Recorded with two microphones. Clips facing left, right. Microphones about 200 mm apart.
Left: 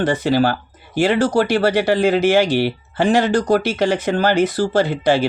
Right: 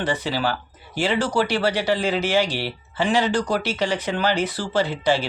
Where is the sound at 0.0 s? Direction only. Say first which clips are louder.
Left 8 dB; 45° left (ahead or behind).